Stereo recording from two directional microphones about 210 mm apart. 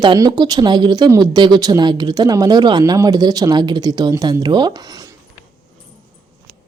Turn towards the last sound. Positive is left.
turn(degrees=-20)  # may be behind; listen again after turning